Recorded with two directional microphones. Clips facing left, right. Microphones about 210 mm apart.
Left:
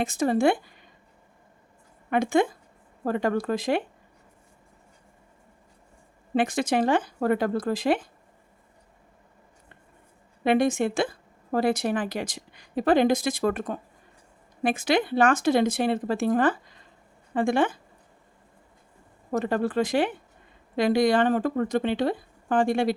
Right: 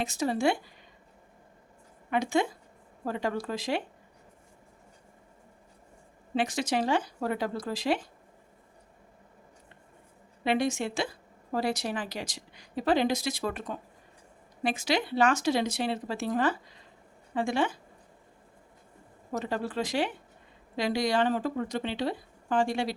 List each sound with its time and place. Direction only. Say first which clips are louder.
0.0 s a woman's voice: left 5 dB; 50° left (ahead or behind)
2.0 s a woman's voice: left 5 dB; 55° left (ahead or behind)
6.3 s a woman's voice: left 5 dB; 55° left (ahead or behind)
10.4 s a woman's voice: left 6 dB; 50° left (ahead or behind)
19.3 s a woman's voice: left 7 dB; 55° left (ahead or behind)